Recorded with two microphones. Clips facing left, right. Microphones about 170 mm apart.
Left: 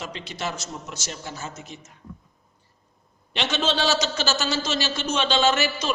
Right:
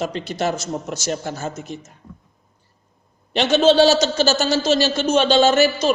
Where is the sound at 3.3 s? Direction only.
40° right (ahead or behind).